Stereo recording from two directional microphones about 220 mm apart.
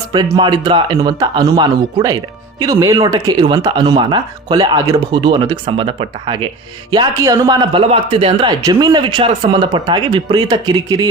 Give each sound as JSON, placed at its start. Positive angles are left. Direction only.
{"t": 0.1, "sound": "speech", "side_deg": -20}